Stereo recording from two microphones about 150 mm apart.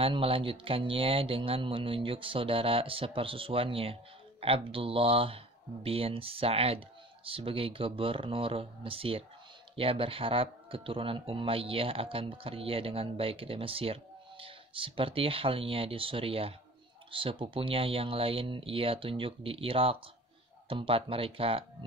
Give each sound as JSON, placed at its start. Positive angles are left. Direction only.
{"t": 0.0, "sound": "speech", "side_deg": -40}